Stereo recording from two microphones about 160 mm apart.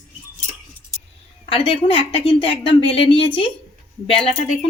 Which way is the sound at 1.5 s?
35° left (ahead or behind).